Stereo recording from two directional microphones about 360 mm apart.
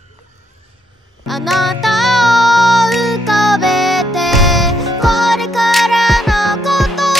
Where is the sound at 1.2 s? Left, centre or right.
Centre.